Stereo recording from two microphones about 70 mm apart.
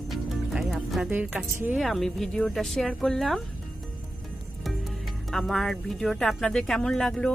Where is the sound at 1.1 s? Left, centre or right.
Right.